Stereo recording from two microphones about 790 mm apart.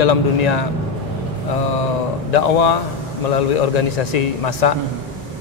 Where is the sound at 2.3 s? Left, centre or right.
Left.